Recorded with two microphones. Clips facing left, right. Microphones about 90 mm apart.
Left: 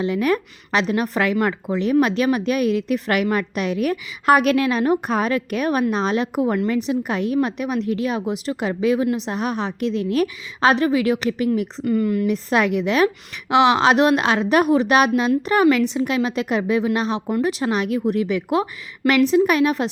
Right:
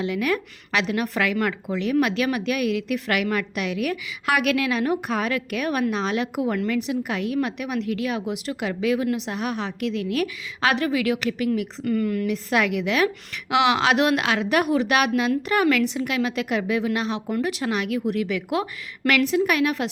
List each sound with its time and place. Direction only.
0.0 s a woman's voice: 35° left (ahead or behind)
11.9 s a woman's voice: 20° left (ahead or behind)
12.3 s a woman's voice: 30° left (ahead or behind)